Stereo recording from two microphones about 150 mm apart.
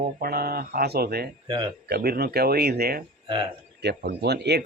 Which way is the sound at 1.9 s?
90° right.